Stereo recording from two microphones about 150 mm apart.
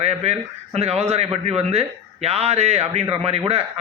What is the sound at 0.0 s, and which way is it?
Speech, 45° right (ahead or behind).